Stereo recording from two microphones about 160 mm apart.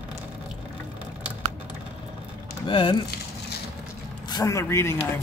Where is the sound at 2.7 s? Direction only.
35° left (ahead or behind).